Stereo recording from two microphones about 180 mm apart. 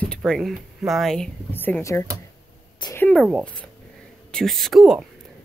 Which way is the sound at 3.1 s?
Centre (ahead or behind).